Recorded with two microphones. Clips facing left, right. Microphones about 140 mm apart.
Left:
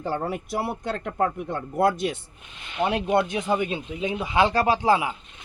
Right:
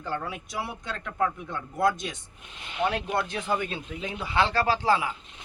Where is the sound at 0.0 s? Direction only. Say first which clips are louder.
Left 5 dB; 40° left (ahead or behind).